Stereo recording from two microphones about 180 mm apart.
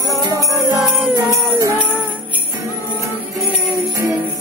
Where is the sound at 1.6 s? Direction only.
15° right (ahead or behind).